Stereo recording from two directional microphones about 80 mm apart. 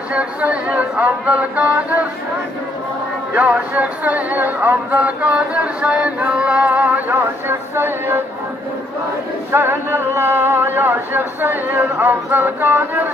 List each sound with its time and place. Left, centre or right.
0.1 s speech: centre
3.3 s speech: centre
9.5 s speech: right